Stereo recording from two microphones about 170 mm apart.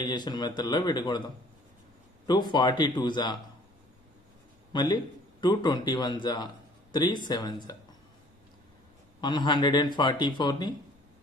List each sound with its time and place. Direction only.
0.0 s speech: 25° left (ahead or behind)
2.2 s speech: 25° left (ahead or behind)
4.7 s speech: 25° left (ahead or behind)
9.2 s speech: 25° left (ahead or behind)